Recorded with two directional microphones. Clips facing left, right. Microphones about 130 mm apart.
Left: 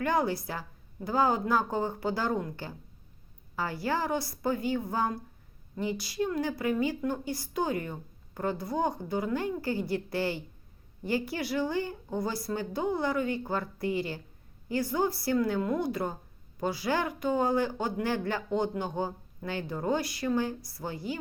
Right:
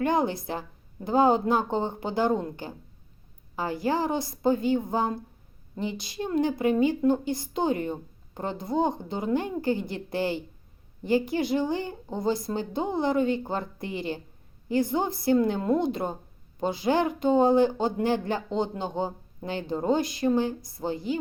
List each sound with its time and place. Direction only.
0.0 s a woman's voice: 20° right (ahead or behind)